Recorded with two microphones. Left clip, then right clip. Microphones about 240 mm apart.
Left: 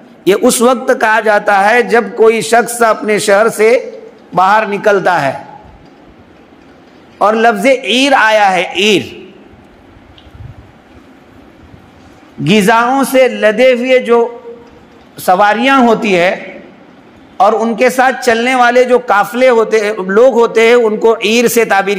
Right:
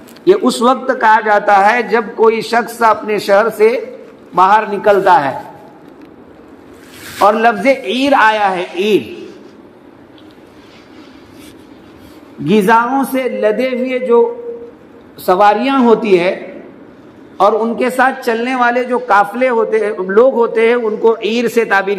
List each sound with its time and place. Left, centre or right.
0.2 s a man's voice: left
7.2 s a man's voice: left
12.4 s a man's voice: left
15.2 s a man's voice: left
17.4 s a man's voice: left